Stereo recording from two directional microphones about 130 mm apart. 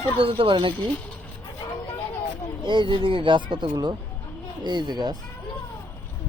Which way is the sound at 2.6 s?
35° right (ahead or behind).